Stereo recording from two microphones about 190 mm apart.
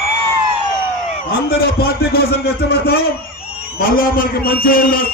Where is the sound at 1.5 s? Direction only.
55° left (ahead or behind).